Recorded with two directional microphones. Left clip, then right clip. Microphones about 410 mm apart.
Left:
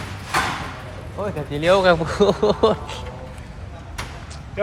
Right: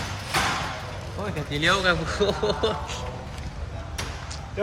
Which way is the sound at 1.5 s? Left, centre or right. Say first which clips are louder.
Left 6 dB; centre.